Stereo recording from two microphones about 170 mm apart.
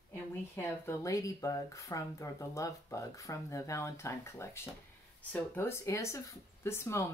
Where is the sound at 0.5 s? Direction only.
15° left (ahead or behind).